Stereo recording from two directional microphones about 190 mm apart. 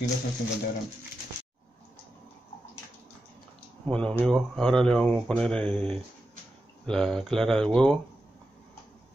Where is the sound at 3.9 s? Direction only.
5° left (ahead or behind).